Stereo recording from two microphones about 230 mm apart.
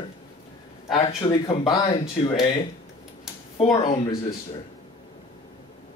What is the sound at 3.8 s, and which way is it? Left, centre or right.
Speech, left.